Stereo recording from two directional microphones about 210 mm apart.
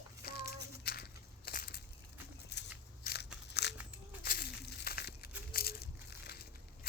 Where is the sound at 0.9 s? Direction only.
50° left (ahead or behind).